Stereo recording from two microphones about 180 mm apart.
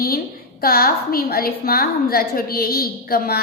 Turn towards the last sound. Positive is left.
turn(degrees=60)  # may be behind; listen again after turning